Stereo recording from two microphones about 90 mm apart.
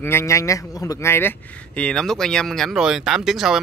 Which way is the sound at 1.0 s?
25° left (ahead or behind).